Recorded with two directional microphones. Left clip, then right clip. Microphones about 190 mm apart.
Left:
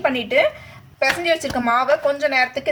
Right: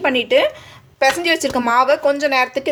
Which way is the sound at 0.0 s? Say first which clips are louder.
Right 3 dB; 50° right (ahead or behind).